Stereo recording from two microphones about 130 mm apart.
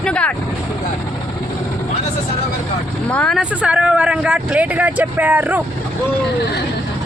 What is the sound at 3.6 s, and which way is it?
Speech, 10° right (ahead or behind).